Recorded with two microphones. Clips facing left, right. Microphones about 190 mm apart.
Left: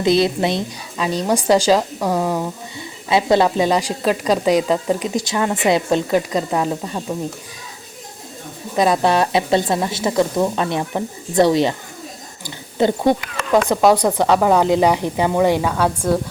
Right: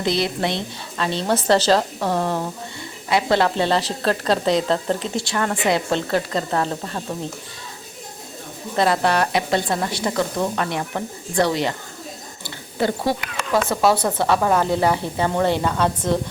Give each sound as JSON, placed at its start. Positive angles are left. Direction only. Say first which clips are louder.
{"t": 0.0, "sound": "a woman's voice", "louder": "left 6 dB", "side_deg": 20}
{"t": 3.1, "sound": "speech", "louder": "left 3 dB", "side_deg": 20}
{"t": 8.7, "sound": "a woman's voice", "louder": "left 3 dB", "side_deg": 15}
{"t": 12.8, "sound": "a woman's voice", "louder": "left 5 dB", "side_deg": 20}